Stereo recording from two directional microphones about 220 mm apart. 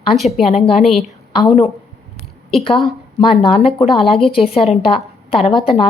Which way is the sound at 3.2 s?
25° left (ahead or behind).